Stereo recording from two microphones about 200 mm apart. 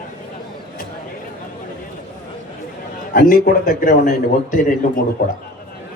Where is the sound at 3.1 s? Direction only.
45° left (ahead or behind).